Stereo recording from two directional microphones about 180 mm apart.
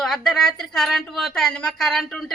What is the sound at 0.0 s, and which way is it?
Speech, centre (ahead or behind).